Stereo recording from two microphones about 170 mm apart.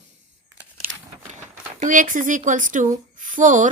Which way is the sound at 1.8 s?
50° right (ahead or behind).